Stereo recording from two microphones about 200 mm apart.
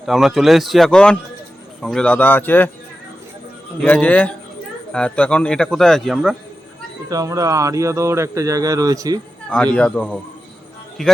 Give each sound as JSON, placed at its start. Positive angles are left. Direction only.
{"t": 0.0, "sound": "speech", "side_deg": 0}
{"t": 3.8, "sound": "speech", "side_deg": 10}
{"t": 7.1, "sound": "speech", "side_deg": -15}
{"t": 9.7, "sound": "speech", "side_deg": 5}